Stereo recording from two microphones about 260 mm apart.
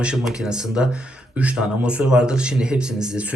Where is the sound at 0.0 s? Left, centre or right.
Centre.